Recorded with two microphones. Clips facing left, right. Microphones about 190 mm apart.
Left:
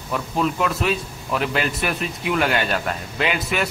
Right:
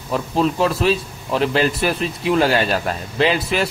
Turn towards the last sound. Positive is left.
turn(degrees=-30)  # may be behind; listen again after turning